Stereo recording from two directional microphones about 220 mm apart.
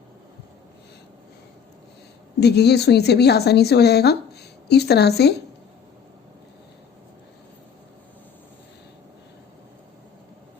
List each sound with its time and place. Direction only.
2.4 s a woman's voice: 50° left (ahead or behind)